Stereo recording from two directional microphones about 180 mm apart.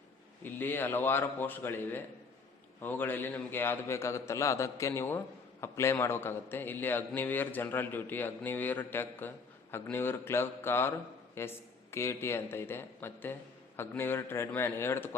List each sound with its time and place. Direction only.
0.4 s a man's voice: 10° left (ahead or behind)